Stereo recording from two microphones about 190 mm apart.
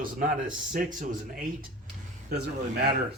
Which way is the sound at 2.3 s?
60° right (ahead or behind).